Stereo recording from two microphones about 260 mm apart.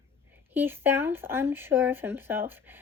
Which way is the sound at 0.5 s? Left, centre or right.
Centre.